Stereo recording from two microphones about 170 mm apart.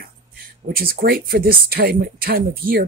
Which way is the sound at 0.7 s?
60° right (ahead or behind).